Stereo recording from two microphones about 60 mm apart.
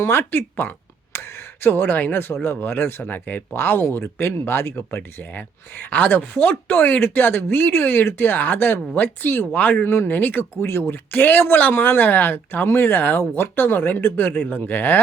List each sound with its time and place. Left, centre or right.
0.0 s speech: left